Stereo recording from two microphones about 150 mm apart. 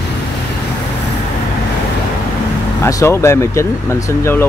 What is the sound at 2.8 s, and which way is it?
Speech, 20° left (ahead or behind).